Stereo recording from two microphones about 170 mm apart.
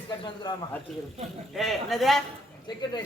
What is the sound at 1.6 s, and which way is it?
Speech, centre (ahead or behind).